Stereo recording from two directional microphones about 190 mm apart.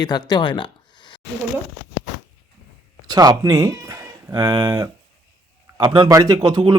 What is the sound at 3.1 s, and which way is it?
A man's voice, 20° right (ahead or behind).